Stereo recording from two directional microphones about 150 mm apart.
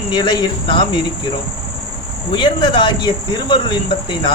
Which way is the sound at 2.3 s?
30° left (ahead or behind).